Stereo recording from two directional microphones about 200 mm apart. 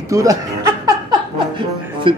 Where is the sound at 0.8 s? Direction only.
20° right (ahead or behind).